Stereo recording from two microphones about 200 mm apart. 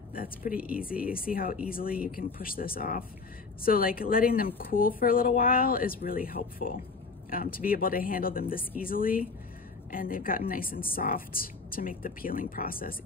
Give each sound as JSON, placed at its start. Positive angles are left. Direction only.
{"t": 0.1, "sound": "speech", "side_deg": 45}